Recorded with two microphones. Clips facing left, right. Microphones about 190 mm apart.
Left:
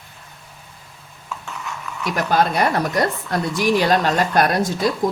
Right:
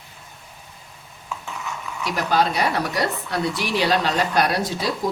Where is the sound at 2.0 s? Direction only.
50° left (ahead or behind).